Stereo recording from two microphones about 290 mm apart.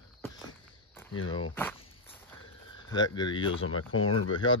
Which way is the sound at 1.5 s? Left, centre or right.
Centre.